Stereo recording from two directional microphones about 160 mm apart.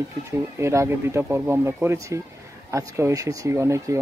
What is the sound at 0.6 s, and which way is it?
Speech, 15° right (ahead or behind).